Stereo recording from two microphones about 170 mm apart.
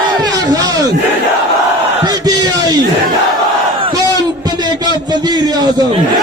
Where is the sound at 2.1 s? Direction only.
25° right (ahead or behind).